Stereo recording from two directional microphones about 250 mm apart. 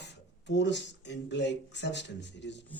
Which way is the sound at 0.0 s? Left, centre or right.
Left.